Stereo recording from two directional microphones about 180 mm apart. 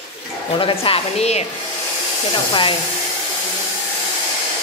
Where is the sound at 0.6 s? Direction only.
30° left (ahead or behind).